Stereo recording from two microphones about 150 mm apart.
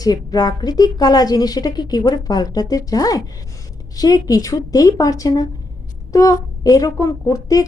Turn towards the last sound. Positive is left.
turn(degrees=25)  # may be behind; listen again after turning